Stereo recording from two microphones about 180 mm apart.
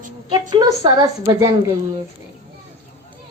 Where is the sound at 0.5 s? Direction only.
20° right (ahead or behind).